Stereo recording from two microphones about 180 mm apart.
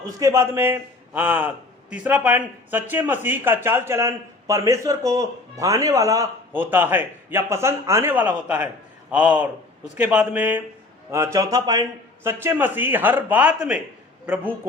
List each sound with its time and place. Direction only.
0.0 s a man's voice: 20° right (ahead or behind)